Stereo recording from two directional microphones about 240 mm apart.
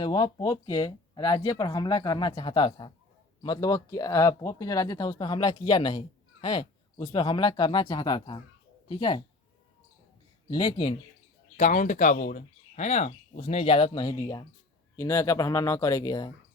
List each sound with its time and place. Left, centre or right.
0.0 s speech: centre
10.5 s speech: left
11.5 s speech: left; by 16.3 s centre